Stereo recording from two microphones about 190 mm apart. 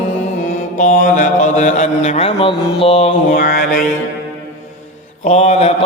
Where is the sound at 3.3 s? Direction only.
50° left (ahead or behind).